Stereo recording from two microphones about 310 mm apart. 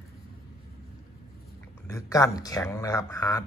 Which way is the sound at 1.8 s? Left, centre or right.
Centre.